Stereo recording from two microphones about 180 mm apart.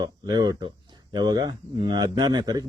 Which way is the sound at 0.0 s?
20° right (ahead or behind).